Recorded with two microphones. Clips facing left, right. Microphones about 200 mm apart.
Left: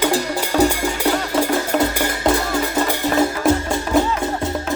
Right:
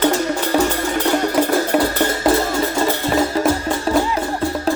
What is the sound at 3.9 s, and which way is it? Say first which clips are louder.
Music: even; 30° right (ahead or behind).